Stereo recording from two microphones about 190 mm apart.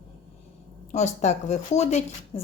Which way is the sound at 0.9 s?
35° left (ahead or behind).